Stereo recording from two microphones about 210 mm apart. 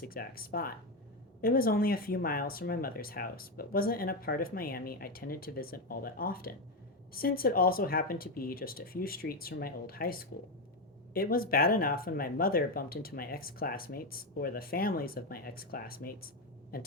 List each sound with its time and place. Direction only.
0.0 s speech: 45° left (ahead or behind)